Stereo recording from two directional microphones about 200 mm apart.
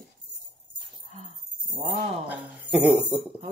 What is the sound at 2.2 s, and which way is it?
Speech, 5° right (ahead or behind).